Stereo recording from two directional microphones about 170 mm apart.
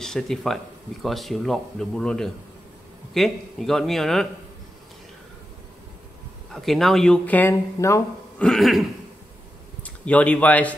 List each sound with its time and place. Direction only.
0.0 s speech: 5° left (ahead or behind)
6.5 s speech: centre (ahead or behind)
8.4 s speech: centre (ahead or behind)
9.8 s speech: 10° left (ahead or behind)